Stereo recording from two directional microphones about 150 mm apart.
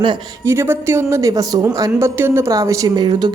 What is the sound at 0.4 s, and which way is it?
A woman's voice, 15° right (ahead or behind).